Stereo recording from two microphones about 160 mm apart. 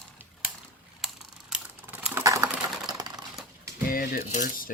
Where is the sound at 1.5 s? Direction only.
5° right (ahead or behind).